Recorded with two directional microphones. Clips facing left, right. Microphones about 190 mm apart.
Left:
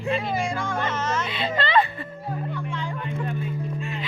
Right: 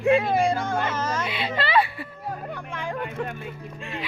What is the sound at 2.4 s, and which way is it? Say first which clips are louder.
Music: left 3 dB; 45° right (ahead or behind).